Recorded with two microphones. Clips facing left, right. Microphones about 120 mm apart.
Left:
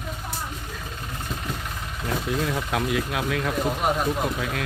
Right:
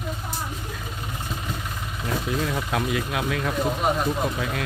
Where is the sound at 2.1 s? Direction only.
Centre (ahead or behind).